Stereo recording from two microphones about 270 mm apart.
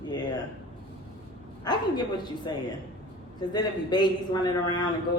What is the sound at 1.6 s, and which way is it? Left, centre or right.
Speech, centre.